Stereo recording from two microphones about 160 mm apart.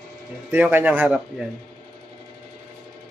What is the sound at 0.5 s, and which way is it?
Speech, 10° right (ahead or behind).